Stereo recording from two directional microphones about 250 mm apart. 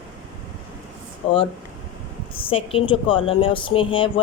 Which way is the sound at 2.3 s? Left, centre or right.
Left.